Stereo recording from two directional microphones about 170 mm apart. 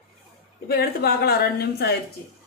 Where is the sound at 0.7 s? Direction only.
70° left (ahead or behind).